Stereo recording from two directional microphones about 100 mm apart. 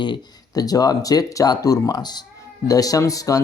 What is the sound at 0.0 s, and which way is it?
Speech, 45° left (ahead or behind).